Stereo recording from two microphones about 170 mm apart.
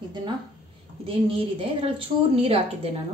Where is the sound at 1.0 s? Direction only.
30° right (ahead or behind).